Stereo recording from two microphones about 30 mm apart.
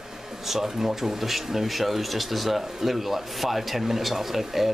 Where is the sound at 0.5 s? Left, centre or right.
Centre.